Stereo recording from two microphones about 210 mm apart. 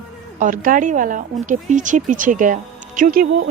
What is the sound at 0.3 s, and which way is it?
Speech, 40° right (ahead or behind).